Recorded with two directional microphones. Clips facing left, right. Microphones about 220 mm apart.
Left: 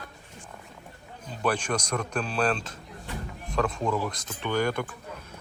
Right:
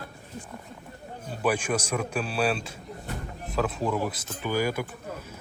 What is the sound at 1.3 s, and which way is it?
A man's voice, 10° right (ahead or behind).